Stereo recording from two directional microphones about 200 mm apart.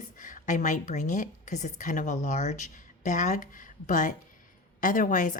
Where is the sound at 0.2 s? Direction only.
40° left (ahead or behind).